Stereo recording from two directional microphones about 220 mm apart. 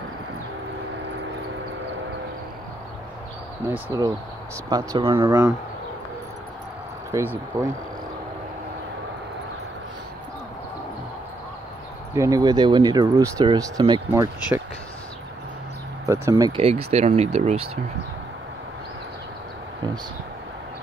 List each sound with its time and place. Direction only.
3.7 s speech: 15° right (ahead or behind)
7.1 s speech: 10° right (ahead or behind)
12.1 s speech: 15° right (ahead or behind)
16.1 s speech: 15° right (ahead or behind)